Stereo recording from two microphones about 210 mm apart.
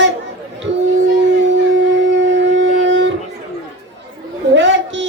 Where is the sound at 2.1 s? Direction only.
60° right (ahead or behind).